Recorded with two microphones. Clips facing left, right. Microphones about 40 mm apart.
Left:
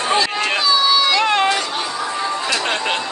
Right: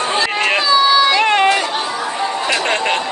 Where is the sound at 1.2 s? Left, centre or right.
Right.